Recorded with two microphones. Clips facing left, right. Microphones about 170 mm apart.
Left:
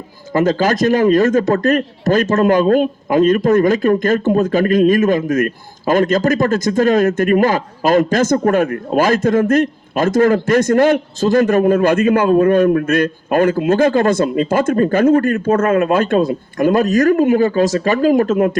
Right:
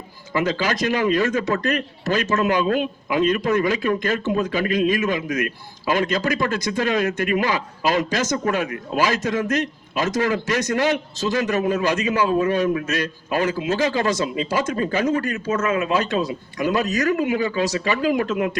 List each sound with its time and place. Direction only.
0.3 s speech: 45° left (ahead or behind)